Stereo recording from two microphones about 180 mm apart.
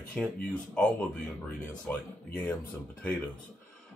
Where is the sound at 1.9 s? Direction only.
5° left (ahead or behind).